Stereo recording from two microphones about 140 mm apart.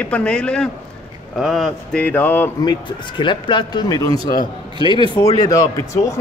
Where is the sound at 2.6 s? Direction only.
30° left (ahead or behind).